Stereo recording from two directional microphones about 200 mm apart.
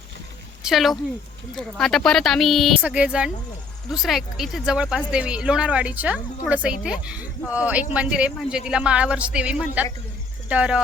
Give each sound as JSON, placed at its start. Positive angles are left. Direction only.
{"t": 0.6, "sound": "speech", "side_deg": 0}